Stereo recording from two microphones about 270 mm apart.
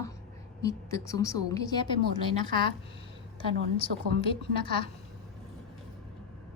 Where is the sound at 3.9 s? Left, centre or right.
Right.